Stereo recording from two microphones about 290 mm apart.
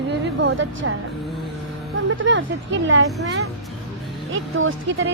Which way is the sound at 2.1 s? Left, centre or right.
Right.